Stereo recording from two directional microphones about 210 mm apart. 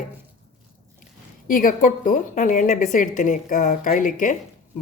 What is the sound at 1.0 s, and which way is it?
A woman's voice, 40° left (ahead or behind).